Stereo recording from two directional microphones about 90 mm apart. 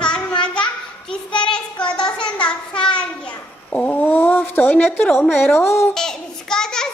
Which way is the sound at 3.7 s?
15° left (ahead or behind).